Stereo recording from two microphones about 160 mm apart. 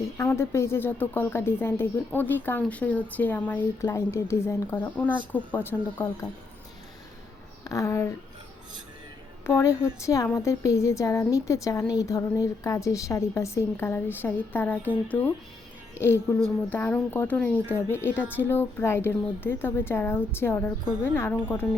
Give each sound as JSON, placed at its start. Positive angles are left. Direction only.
{"t": 0.2, "sound": "speech", "side_deg": 15}
{"t": 7.6, "sound": "a woman's voice", "side_deg": 20}
{"t": 9.6, "sound": "a woman's voice", "side_deg": 20}